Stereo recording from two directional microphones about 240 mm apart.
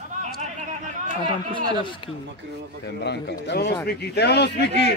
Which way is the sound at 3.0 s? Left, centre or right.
Left.